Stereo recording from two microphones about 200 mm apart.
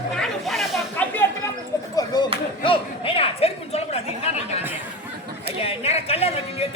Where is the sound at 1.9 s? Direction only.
20° left (ahead or behind).